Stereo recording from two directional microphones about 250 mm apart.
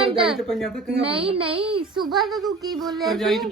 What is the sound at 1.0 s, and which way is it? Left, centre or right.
A woman's voice, right.